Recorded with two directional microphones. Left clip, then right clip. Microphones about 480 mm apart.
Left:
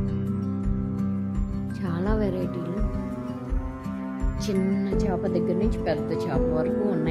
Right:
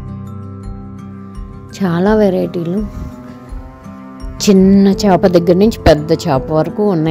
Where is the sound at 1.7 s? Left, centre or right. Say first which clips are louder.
Right 16 dB; centre.